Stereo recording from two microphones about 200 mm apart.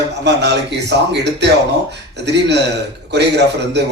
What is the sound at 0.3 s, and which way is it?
A man's voice, 60° right (ahead or behind).